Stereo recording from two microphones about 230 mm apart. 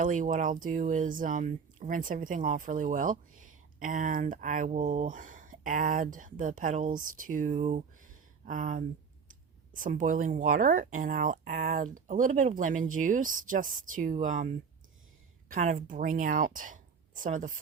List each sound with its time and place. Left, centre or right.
0.0 s a woman's voice: right